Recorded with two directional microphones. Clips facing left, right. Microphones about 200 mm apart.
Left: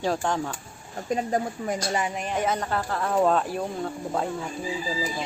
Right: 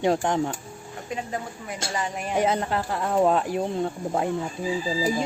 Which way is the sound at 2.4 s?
25° right (ahead or behind).